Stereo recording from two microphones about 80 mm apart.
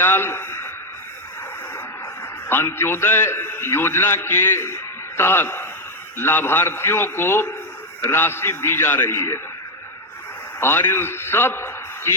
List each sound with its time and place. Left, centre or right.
0.0 s a man's voice: left
2.5 s a man's voice: left
10.6 s a man's voice: left